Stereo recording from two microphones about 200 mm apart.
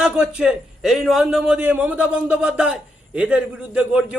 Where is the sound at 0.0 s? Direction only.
5° right (ahead or behind).